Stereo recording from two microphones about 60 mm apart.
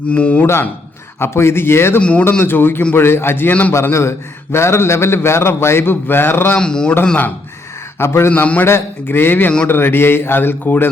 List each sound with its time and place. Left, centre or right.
0.1 s speech: left
1.2 s a man's voice: left
2.0 s speech: centre
2.4 s a man's voice: left
6.6 s speech: centre
7.9 s a man's voice: left
8.3 s speech: left
8.6 s speech: left